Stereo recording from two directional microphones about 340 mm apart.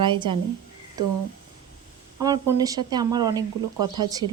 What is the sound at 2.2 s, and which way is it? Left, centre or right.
Speech, centre.